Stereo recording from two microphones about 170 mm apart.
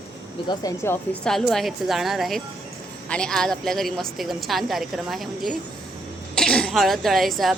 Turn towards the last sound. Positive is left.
turn(degrees=0)  # may be behind; listen again after turning